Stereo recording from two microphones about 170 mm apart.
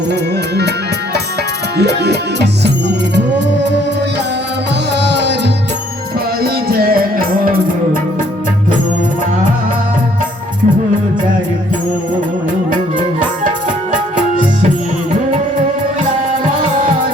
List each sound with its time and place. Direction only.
0.1 s music: 75° right (ahead or behind)
1.8 s music: 75° right (ahead or behind)
3.2 s music: 90° right
5.0 s music: 90° right
6.4 s music: 65° right (ahead or behind)
13.9 s music: 50° right (ahead or behind)